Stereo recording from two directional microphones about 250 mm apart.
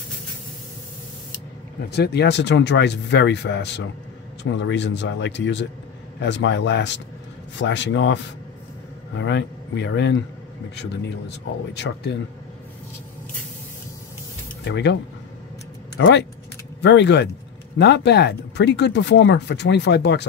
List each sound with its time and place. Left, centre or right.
1.9 s speech: left
14.6 s speech: left
16.0 s speech: left